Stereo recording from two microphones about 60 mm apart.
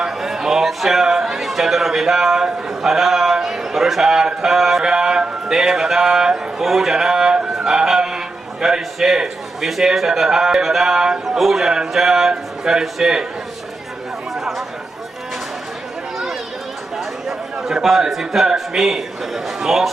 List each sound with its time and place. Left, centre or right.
0.0 s a sound: centre
4.8 s speech: centre
7.5 s a sound: centre
8.6 s a man's voice: centre
14.3 s chatter: centre
17.0 s a man's voice: centre